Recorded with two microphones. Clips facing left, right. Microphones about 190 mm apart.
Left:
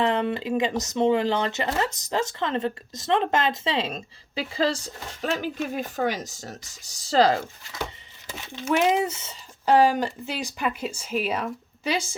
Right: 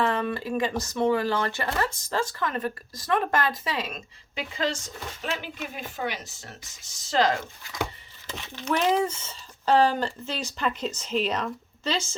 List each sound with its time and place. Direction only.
0.0 s speech: 20° left (ahead or behind); by 7.4 s 35° left (ahead or behind)
8.6 s speech: 15° left (ahead or behind)